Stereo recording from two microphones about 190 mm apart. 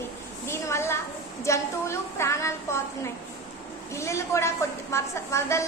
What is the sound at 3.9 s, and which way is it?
A woman's voice, 15° left (ahead or behind).